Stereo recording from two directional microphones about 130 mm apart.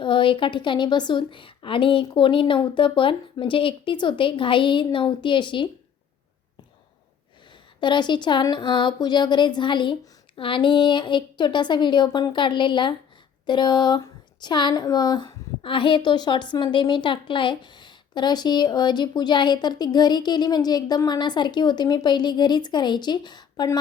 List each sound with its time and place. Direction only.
0.0 s speech: 40° left (ahead or behind)
7.8 s speech: 35° left (ahead or behind)